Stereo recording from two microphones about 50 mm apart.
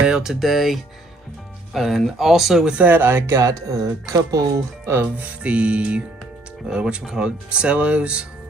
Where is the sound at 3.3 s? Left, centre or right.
Right.